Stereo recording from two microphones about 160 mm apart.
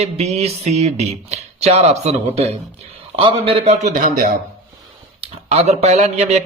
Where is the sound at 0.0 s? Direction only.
40° right (ahead or behind).